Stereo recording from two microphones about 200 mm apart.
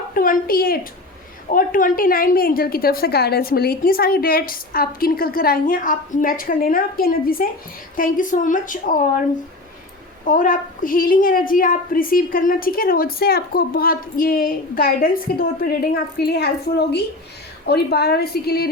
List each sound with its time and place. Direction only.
0.1 s a woman's voice: 45° left (ahead or behind)
10.2 s a woman's voice: 45° left (ahead or behind)